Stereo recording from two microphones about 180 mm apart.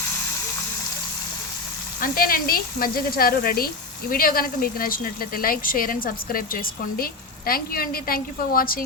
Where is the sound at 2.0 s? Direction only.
50° left (ahead or behind).